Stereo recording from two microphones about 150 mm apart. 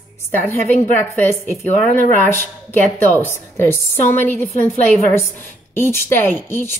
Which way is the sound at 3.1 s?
15° left (ahead or behind).